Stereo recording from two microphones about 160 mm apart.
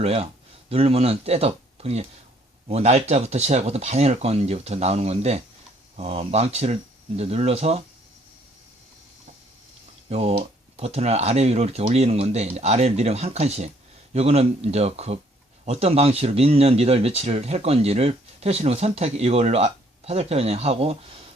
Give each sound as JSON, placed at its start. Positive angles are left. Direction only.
{"t": 0.0, "sound": "speech", "side_deg": -40}
{"t": 10.1, "sound": "speech", "side_deg": -40}